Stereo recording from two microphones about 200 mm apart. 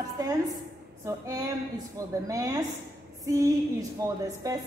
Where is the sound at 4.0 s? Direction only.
20° right (ahead or behind).